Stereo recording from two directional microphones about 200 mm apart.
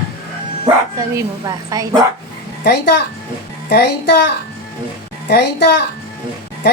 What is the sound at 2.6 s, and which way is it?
A child's voice, 55° left (ahead or behind).